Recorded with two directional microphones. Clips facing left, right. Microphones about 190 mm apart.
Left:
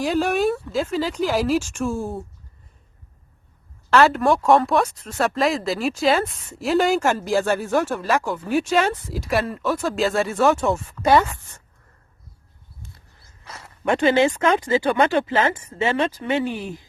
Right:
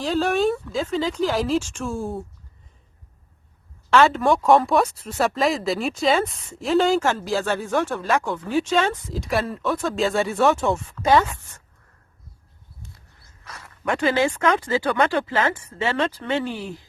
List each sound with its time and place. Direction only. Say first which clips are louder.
0.0 s speech: left 1 dB; 10° left (ahead or behind)
3.8 s speech: left 1 dB; centre (ahead or behind)
11.0 s speech: left 1 dB; 10° left (ahead or behind)
13.5 s speech: left 4 dB; 25° left (ahead or behind)